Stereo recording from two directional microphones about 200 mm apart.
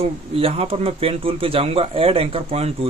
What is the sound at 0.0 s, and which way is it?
Speech, 30° right (ahead or behind).